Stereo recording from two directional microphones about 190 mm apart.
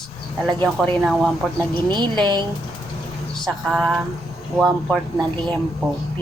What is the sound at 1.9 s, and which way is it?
Speech, 25° right (ahead or behind).